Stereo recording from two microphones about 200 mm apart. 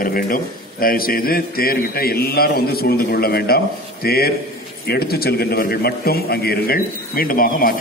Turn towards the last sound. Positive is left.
turn(degrees=45)  # may be behind; listen again after turning